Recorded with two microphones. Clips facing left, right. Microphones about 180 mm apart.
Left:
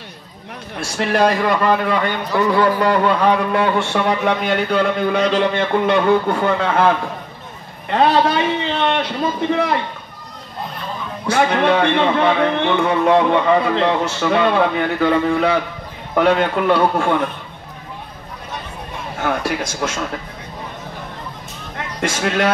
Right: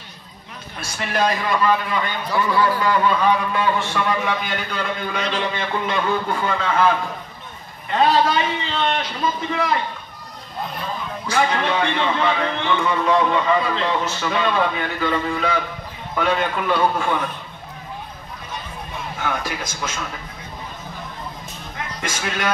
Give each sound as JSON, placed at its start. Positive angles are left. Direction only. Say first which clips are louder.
{"t": 0.7, "sound": "a man's voice", "louder": "left 6 dB", "side_deg": 65}
{"t": 5.1, "sound": "a man's voice", "louder": "left 8 dB", "side_deg": 40}
{"t": 5.5, "sound": "a man's voice", "louder": "left 8 dB", "side_deg": 55}
{"t": 7.9, "sound": "a man's voice", "louder": "left 2 dB", "side_deg": 65}
{"t": 11.2, "sound": "a man's voice", "louder": "left 5 dB", "side_deg": 60}
{"t": 19.4, "sound": "a man's voice", "louder": "left 7 dB", "side_deg": 70}
{"t": 22.0, "sound": "a man's voice", "louder": "left 8 dB", "side_deg": 70}